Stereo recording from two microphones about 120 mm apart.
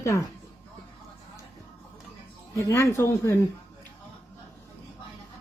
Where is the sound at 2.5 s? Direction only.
20° left (ahead or behind).